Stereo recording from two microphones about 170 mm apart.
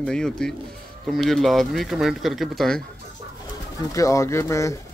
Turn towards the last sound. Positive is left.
turn(degrees=15)  # may be behind; listen again after turning